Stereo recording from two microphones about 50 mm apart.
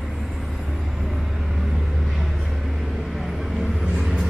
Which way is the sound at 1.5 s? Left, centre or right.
Centre.